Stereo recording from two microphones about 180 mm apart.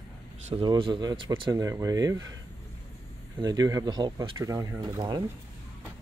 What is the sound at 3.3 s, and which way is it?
Speech, 20° right (ahead or behind).